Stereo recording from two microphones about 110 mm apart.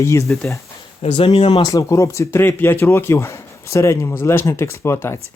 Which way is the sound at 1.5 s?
35° left (ahead or behind).